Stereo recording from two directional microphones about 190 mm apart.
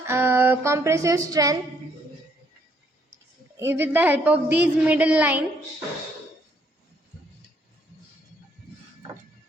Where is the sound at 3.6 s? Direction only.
10° right (ahead or behind).